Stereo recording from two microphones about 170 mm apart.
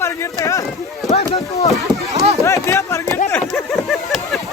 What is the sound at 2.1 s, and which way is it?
Run, 40° right (ahead or behind).